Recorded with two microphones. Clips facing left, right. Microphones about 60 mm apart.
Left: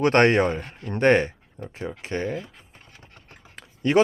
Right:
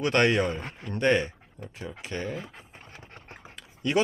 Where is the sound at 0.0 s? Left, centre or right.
Left.